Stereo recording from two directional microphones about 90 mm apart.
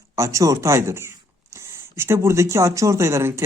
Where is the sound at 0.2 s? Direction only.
35° right (ahead or behind).